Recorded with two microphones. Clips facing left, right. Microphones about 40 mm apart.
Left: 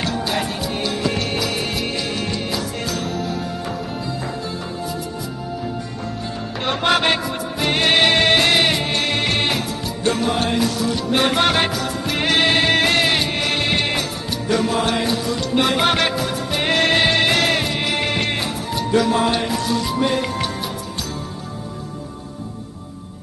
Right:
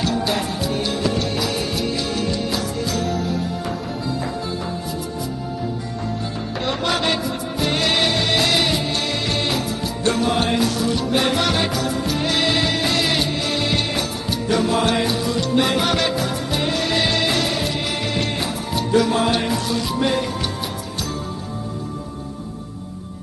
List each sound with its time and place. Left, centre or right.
0.4 s music: left
1.1 s music: left
1.9 s music: left
6.6 s music: left
8.4 s music: left
11.3 s music: left
15.8 s music: left
16.6 s music: left
17.0 s music: left
17.7 s music: left